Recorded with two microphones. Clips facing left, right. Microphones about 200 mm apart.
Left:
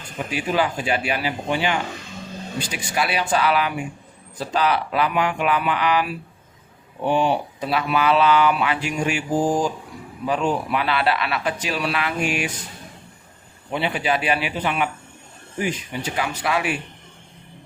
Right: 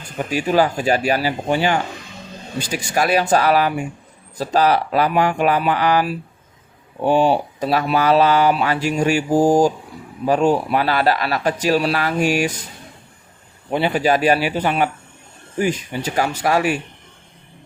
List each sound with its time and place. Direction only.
0.3 s speech: 40° right (ahead or behind)
13.7 s speech: 40° right (ahead or behind)
16.1 s speech: 40° right (ahead or behind)